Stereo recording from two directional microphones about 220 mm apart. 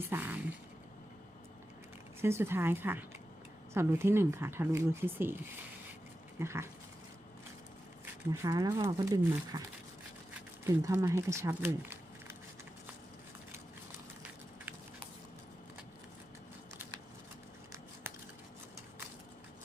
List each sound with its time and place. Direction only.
0.1 s speech: 10° right (ahead or behind)
2.2 s speech: 10° right (ahead or behind)
6.4 s speech: 10° right (ahead or behind)
8.3 s speech: 15° right (ahead or behind)